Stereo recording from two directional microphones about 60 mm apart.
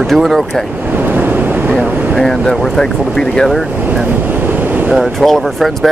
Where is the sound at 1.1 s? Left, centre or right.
Right.